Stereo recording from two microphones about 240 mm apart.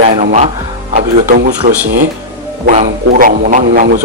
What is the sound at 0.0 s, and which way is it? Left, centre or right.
A man's voice, right.